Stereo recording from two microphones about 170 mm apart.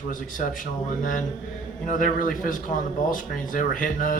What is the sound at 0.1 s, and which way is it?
Speech, 50° left (ahead or behind).